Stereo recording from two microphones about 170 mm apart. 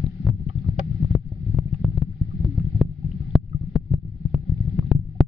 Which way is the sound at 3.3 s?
30° left (ahead or behind).